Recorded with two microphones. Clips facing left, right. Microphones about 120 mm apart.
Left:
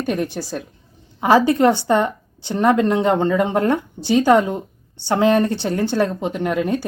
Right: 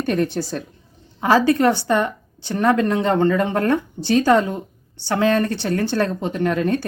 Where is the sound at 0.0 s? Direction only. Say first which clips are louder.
Right 2 dB; 10° left (ahead or behind).